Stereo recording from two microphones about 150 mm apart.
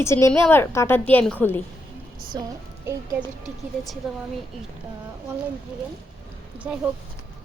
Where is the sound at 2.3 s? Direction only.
25° right (ahead or behind).